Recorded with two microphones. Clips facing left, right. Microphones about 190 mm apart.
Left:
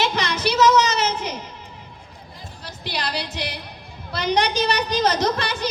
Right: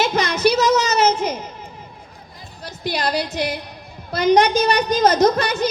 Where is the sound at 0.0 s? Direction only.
45° right (ahead or behind).